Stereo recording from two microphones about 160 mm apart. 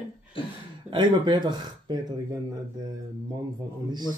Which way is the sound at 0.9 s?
30° right (ahead or behind).